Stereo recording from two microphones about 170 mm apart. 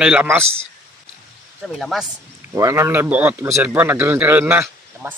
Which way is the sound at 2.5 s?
15° right (ahead or behind).